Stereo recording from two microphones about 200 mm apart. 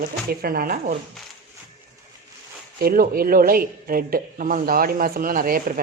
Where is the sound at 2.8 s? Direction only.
45° right (ahead or behind).